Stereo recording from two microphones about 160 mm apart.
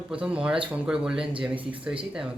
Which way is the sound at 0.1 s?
5° right (ahead or behind).